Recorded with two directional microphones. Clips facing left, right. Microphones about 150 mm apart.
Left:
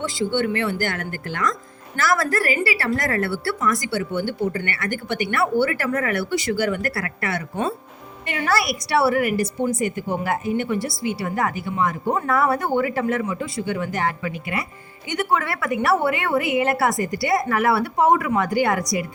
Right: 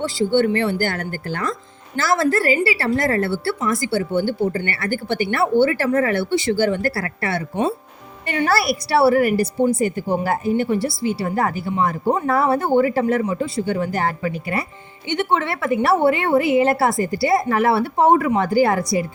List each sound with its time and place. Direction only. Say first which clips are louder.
0.0 s a woman's voice: right 5 dB; 35° right (ahead or behind)
15.1 s a woman's voice: right 2 dB; 25° right (ahead or behind)